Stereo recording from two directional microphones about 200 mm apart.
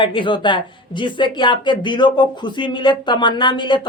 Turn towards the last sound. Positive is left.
turn(degrees=25)  # may be behind; listen again after turning